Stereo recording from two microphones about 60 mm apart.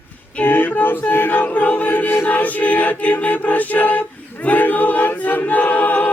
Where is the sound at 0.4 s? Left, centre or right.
Left.